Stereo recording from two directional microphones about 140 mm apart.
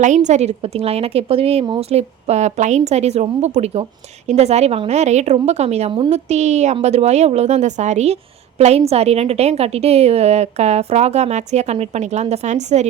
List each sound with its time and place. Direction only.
0.0 s a woman's voice: 55° right (ahead or behind)